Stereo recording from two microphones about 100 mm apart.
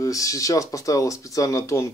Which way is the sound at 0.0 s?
35° left (ahead or behind).